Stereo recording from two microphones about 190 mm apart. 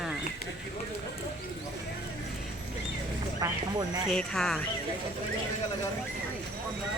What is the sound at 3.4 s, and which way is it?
Speech, 15° right (ahead or behind).